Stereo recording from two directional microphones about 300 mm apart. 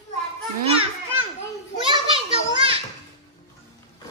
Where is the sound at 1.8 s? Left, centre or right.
Centre.